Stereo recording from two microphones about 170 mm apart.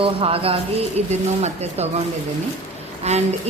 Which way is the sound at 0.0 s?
35° right (ahead or behind).